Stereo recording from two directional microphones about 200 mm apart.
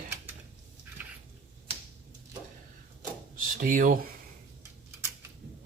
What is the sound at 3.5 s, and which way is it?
Speech, 40° right (ahead or behind).